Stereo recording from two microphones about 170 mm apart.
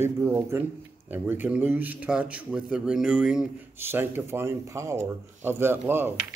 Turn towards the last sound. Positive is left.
turn(degrees=-10)  # may be behind; listen again after turning